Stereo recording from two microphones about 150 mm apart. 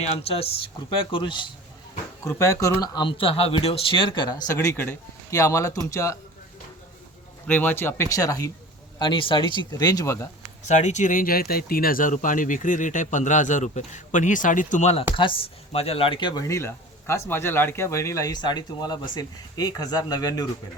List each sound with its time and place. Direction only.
0.2 s speech: 40° left (ahead or behind)
2.2 s speech: 20° left (ahead or behind)
7.4 s speech: 10° left (ahead or behind)
9.0 s speech: 35° left (ahead or behind)
10.6 s speech: 50° left (ahead or behind)
15.1 s speech: 35° left (ahead or behind)